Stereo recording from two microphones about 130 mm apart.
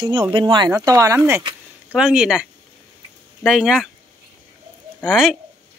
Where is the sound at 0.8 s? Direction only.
25° right (ahead or behind).